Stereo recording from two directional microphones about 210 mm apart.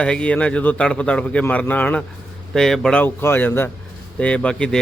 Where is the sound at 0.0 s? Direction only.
5° left (ahead or behind).